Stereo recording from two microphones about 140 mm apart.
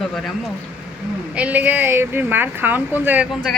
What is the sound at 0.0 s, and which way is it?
Speech, centre (ahead or behind).